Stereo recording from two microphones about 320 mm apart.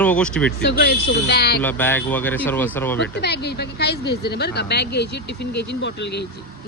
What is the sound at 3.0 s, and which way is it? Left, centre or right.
Speech, left.